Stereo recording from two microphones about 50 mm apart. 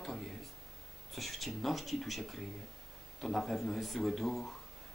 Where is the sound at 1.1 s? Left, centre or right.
Centre.